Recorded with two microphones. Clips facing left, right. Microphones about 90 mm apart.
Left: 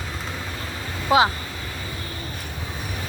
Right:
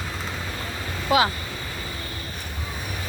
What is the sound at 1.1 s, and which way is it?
Speech, 30° left (ahead or behind).